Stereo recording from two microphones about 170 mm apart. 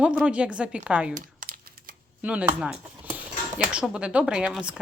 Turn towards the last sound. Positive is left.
turn(degrees=-5)  # may be behind; listen again after turning